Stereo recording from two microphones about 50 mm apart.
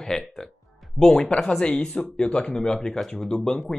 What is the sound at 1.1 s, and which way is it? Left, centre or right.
Speech, left.